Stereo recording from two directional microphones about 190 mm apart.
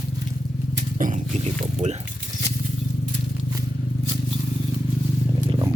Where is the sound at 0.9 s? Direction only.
45° right (ahead or behind).